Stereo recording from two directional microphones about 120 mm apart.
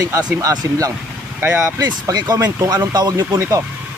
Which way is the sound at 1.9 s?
35° right (ahead or behind).